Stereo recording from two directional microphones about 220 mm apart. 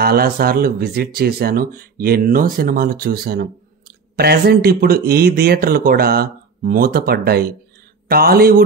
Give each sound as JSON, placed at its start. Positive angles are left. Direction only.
{"t": 0.0, "sound": "speech", "side_deg": -45}